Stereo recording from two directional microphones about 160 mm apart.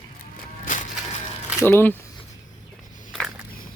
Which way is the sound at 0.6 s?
55° left (ahead or behind).